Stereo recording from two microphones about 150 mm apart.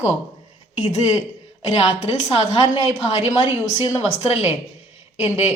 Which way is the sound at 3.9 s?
45° left (ahead or behind).